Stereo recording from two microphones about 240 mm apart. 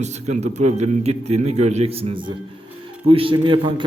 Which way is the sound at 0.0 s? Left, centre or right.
Right.